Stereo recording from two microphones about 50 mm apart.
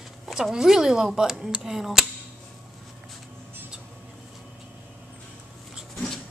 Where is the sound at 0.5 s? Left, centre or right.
Centre.